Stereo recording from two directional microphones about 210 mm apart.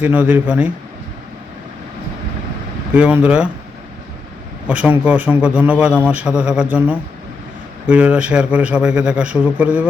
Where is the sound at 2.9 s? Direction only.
5° right (ahead or behind).